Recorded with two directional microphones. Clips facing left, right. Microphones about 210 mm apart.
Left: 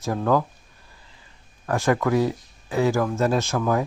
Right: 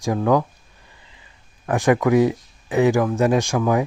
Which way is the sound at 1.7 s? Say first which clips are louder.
Right 4 dB; 15° right (ahead or behind).